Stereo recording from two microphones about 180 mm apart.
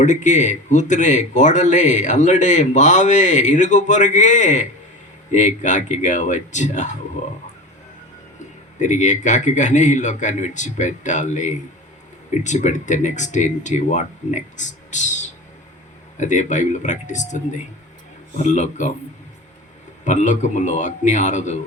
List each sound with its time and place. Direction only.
0.0 s a man's voice: 40° left (ahead or behind)
8.8 s a man's voice: 40° left (ahead or behind)
20.1 s speech: 40° left (ahead or behind)